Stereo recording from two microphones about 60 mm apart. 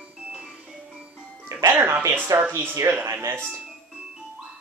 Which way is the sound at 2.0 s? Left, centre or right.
Right.